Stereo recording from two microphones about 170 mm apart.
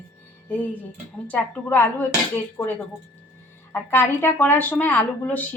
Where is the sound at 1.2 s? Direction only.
10° left (ahead or behind).